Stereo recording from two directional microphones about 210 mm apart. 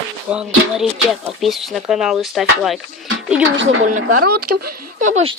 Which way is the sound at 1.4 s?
Centre (ahead or behind).